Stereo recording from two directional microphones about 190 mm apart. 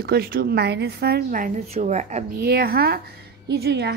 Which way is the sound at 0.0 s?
55° right (ahead or behind).